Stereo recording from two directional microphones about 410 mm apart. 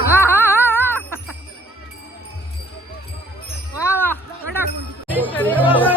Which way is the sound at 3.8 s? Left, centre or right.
Centre.